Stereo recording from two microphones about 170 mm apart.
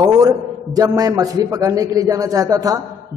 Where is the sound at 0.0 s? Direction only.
20° right (ahead or behind).